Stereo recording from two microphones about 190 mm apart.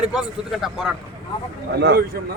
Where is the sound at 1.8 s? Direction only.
60° right (ahead or behind).